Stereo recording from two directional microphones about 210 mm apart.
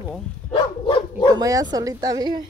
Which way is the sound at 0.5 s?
25° left (ahead or behind).